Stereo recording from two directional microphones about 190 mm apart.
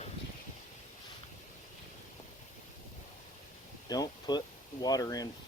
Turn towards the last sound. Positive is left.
turn(degrees=20)  # may be behind; listen again after turning